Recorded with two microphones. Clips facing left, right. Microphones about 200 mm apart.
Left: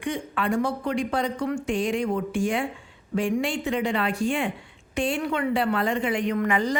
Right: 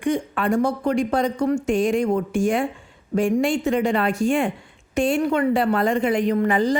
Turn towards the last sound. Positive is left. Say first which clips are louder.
# right 5 dB
turn(degrees=-30)  # may be behind; listen again after turning